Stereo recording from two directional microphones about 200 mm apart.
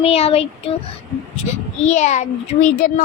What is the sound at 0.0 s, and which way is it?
Speech, 30° left (ahead or behind).